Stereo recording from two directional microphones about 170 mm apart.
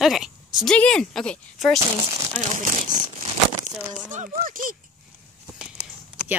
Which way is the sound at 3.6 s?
45° right (ahead or behind).